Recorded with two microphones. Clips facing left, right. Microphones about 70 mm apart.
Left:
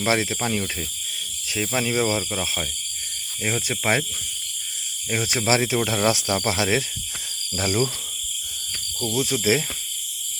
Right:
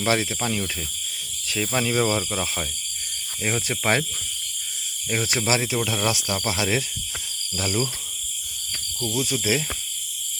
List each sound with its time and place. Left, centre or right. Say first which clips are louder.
0.0 s speech: left 1 dB; left
0.4 s cricket: left 1 dB; centre
1.5 s speech: even; centre
5.5 s speech: left 4 dB; left
9.0 s speech: left 2 dB; left